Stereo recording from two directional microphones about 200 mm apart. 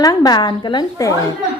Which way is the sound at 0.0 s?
20° left (ahead or behind).